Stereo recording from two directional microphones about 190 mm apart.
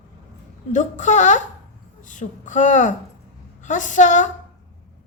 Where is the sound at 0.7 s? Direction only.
40° left (ahead or behind).